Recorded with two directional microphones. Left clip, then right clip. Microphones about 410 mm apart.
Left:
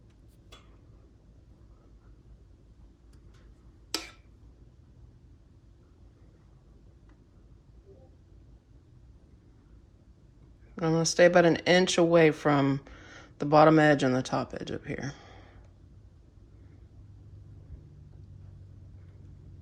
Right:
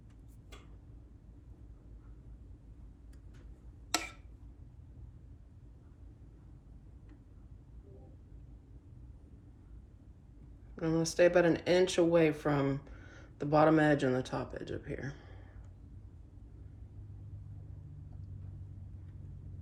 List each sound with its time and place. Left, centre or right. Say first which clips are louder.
10.8 s speech: left 6 dB; centre